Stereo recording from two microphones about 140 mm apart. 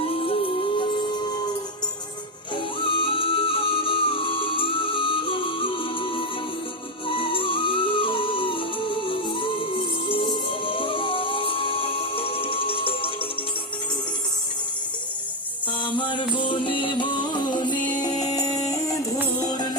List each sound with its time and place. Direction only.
0.0 s music: 45° left (ahead or behind)
2.8 s music: 40° left (ahead or behind)
15.8 s music: 35° left (ahead or behind)